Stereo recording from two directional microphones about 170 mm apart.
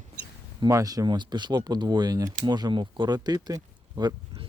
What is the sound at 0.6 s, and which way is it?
Speech, 20° right (ahead or behind).